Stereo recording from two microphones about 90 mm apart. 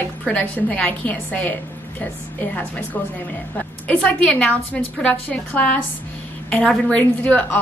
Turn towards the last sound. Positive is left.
turn(degrees=15)  # may be behind; listen again after turning